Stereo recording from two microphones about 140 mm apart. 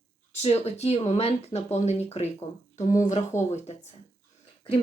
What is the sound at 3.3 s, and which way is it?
Speech, 20° left (ahead or behind).